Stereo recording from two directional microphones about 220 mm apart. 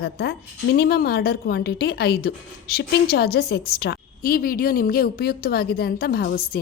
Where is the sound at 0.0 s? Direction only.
50° left (ahead or behind).